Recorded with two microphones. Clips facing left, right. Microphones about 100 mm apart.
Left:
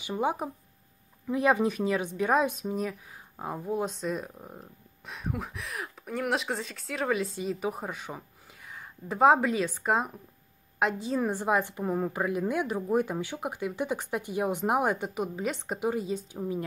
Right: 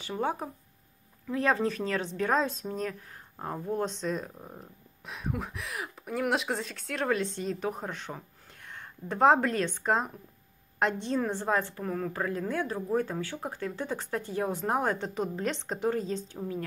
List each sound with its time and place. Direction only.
0.0 s speech: 15° left (ahead or behind)